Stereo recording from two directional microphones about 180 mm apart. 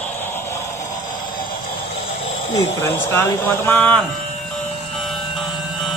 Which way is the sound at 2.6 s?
15° left (ahead or behind).